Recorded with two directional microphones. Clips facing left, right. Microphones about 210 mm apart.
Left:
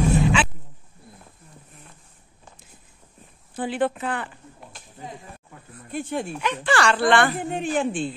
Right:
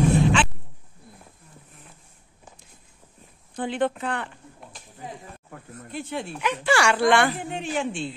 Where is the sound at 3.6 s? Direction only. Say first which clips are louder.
Left 1 dB; 5° left (ahead or behind).